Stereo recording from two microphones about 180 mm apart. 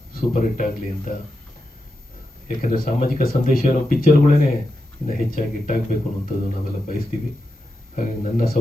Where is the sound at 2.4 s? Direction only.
50° left (ahead or behind).